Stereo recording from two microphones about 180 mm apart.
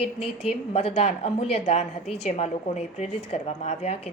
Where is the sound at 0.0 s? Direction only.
35° left (ahead or behind).